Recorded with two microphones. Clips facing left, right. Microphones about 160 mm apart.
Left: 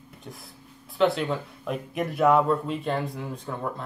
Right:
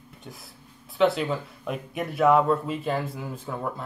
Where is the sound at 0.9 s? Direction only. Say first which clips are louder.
Right 1 dB; centre (ahead or behind).